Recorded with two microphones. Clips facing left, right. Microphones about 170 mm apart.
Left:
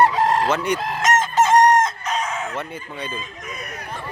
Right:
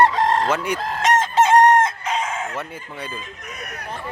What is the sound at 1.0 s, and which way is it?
Chicken, 30° right (ahead or behind).